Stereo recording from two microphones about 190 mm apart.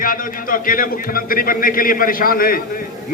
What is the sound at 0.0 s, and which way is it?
A man's voice, 45° left (ahead or behind).